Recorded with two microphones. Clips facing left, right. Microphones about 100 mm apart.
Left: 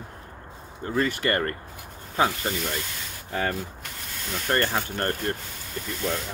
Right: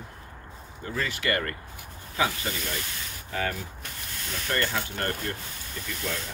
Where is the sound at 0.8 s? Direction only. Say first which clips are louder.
Left 4 dB; 45° left (ahead or behind).